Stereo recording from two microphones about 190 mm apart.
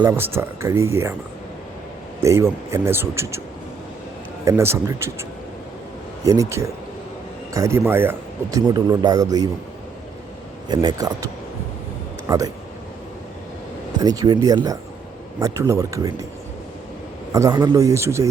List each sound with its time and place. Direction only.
0.0 s speech: 10° right (ahead or behind)
2.2 s speech: 15° right (ahead or behind)
4.4 s speech: 15° right (ahead or behind)
6.2 s speech: 15° right (ahead or behind)
10.7 s speech: 20° right (ahead or behind)
12.3 s speech: 20° right (ahead or behind)
14.0 s speech: 20° right (ahead or behind)
17.3 s speech: 15° right (ahead or behind)